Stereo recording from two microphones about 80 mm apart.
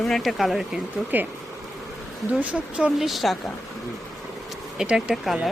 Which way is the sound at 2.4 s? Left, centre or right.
Centre.